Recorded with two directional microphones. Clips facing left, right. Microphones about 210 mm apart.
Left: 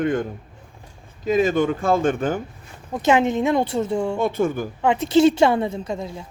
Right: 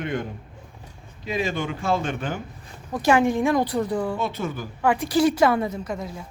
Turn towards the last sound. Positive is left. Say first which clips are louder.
# left 2 dB
turn(degrees=25)  # may be behind; listen again after turning